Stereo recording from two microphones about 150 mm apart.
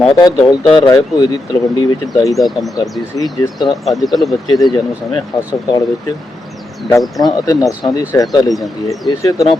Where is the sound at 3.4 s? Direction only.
25° left (ahead or behind).